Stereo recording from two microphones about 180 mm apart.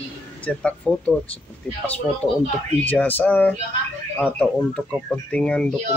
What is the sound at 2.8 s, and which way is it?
Speech, 10° left (ahead or behind).